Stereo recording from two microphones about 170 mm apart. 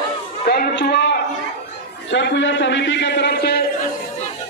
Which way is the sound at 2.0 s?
90° left.